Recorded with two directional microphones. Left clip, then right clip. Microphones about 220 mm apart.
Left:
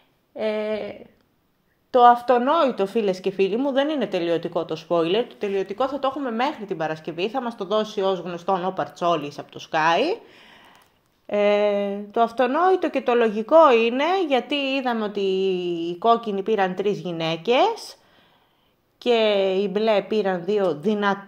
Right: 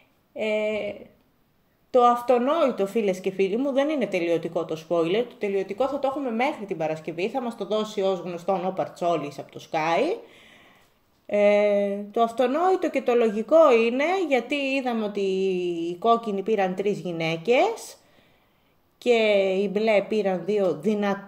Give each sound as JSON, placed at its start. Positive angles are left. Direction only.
{"t": 0.4, "sound": "a sound", "side_deg": 40}
{"t": 1.9, "sound": "speech", "side_deg": 10}
{"t": 18.9, "sound": "speech", "side_deg": 5}